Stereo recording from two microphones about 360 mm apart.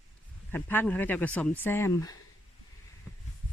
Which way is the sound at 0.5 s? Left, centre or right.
Centre.